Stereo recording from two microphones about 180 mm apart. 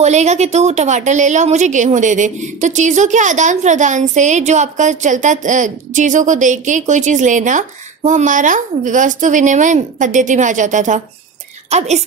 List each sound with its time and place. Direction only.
0.0 s a woman's voice: 40° right (ahead or behind)